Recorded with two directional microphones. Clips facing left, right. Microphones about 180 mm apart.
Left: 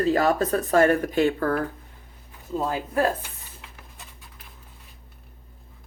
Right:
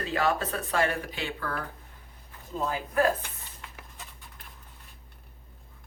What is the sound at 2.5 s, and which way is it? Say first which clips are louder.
Speech: left 3 dB; 35° left (ahead or behind).